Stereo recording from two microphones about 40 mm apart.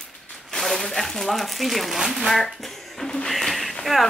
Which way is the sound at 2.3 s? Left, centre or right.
Centre.